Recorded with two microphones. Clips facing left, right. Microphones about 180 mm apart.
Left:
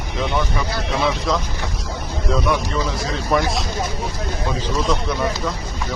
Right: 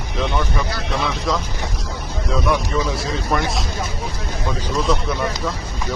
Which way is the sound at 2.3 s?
Centre (ahead or behind).